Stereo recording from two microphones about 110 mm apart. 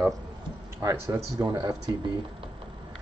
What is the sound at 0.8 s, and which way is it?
Speech, 30° right (ahead or behind).